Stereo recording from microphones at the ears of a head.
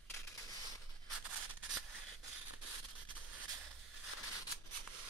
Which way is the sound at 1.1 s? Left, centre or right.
Right.